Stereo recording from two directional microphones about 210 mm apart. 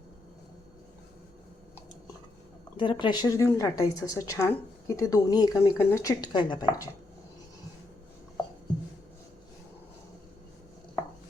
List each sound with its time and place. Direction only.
2.7 s speech: 25° left (ahead or behind)